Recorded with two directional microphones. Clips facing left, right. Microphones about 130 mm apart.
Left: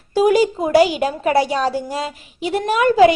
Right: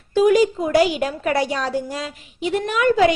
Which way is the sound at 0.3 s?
35° left (ahead or behind).